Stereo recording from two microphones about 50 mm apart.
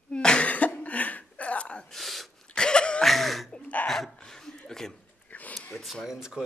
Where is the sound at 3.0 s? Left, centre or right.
Centre.